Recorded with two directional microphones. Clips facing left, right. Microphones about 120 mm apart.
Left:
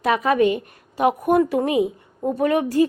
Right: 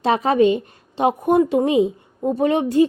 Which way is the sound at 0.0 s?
30° right (ahead or behind).